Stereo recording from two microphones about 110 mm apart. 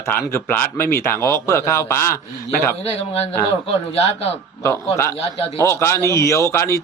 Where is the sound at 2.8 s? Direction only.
65° left (ahead or behind).